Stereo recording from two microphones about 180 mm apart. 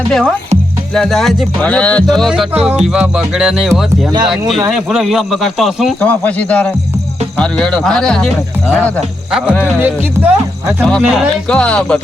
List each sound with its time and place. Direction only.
0.1 s speech: 5° left (ahead or behind)
9.8 s speech: 10° right (ahead or behind)
11.4 s speech: 5° left (ahead or behind)